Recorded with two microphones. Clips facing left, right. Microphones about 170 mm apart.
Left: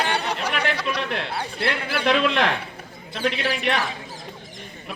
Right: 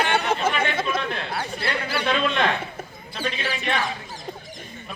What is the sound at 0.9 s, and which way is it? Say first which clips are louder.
A man's voice: even; 85° left.